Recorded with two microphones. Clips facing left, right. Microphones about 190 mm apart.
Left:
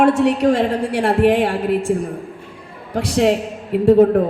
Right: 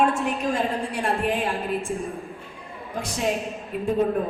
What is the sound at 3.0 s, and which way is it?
A man's voice, 80° left.